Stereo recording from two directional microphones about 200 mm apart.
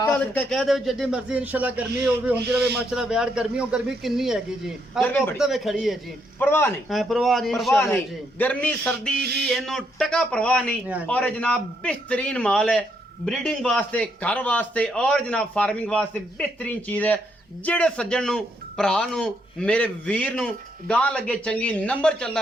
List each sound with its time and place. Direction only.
0.2 s a man's voice: 5° left (ahead or behind)
6.4 s a man's voice: 10° left (ahead or behind)
6.8 s a man's voice: centre (ahead or behind)
9.1 s a sound: 55° right (ahead or behind)
9.4 s a man's voice: centre (ahead or behind)